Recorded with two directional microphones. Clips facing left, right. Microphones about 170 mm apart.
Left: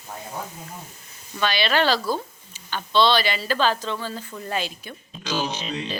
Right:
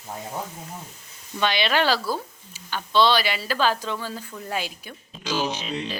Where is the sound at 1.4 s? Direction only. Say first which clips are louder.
Even; 20° right (ahead or behind).